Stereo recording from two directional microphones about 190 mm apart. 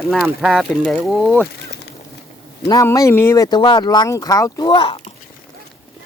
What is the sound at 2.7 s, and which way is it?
Speech, 15° left (ahead or behind).